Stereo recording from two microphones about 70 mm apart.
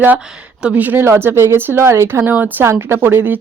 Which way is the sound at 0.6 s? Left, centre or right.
Right.